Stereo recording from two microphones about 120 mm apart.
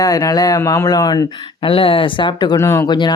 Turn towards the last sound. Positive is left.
turn(degrees=40)  # may be behind; listen again after turning